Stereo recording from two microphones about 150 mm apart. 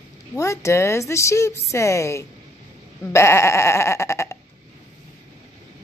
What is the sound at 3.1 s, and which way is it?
Sheep, 15° left (ahead or behind).